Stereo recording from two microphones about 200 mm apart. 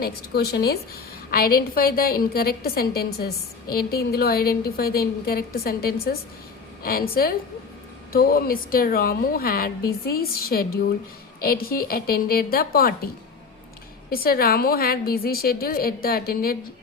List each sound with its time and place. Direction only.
0.0 s a woman's voice: 50° left (ahead or behind)
14.1 s a woman's voice: 50° left (ahead or behind)